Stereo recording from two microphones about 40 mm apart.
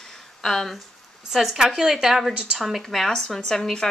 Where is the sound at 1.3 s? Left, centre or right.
Centre.